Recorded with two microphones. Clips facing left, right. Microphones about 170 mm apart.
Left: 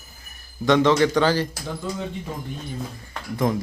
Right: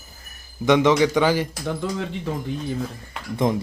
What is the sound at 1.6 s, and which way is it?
Speech, 85° right.